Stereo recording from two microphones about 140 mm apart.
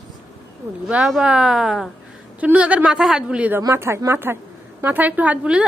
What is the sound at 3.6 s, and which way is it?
Speech, 20° right (ahead or behind).